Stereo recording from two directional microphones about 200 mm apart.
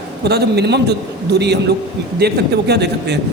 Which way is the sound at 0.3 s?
55° right (ahead or behind).